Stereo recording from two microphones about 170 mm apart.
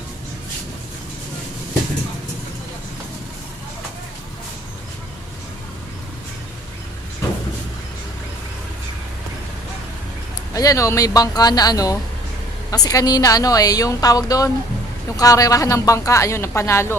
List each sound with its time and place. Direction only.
10.5 s a woman's voice: 20° left (ahead or behind)